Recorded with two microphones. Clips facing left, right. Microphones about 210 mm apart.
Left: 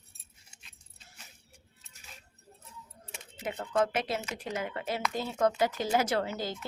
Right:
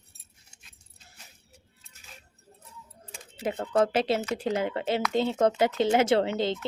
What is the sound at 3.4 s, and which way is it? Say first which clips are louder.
Speech: right 5 dB; 35° right (ahead or behind).